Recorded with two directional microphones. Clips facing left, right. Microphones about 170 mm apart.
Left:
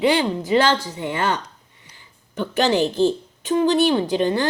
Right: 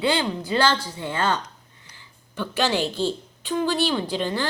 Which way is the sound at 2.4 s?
20° left (ahead or behind).